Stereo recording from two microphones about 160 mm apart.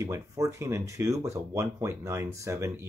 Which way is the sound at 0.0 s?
20° right (ahead or behind).